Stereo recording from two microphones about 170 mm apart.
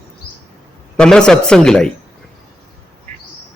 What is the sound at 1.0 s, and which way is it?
Speech, 5° left (ahead or behind).